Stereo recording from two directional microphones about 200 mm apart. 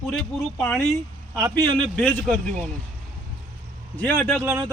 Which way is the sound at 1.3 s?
15° right (ahead or behind).